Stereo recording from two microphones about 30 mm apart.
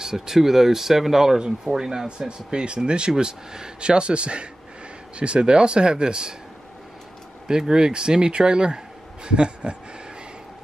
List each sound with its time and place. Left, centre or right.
0.0 s speech: centre
2.0 s speech: right
7.4 s speech: right